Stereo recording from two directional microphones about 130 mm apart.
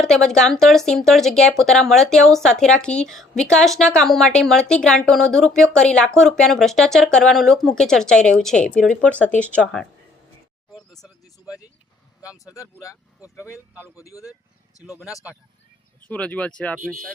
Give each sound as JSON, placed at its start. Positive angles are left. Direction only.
{"t": 0.0, "sound": "speech", "side_deg": 5}
{"t": 10.8, "sound": "a sound", "side_deg": 0}
{"t": 12.2, "sound": "speech", "side_deg": -10}
{"t": 14.0, "sound": "speech", "side_deg": 25}
{"t": 16.0, "sound": "speech", "side_deg": 10}